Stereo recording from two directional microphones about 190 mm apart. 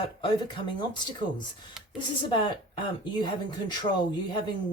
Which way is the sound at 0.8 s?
25° left (ahead or behind).